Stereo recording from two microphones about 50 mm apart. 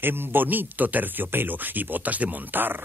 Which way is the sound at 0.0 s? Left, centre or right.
Right.